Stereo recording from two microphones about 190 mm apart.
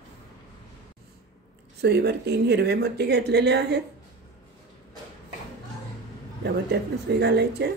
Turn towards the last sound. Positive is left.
turn(degrees=-60)  # may be behind; listen again after turning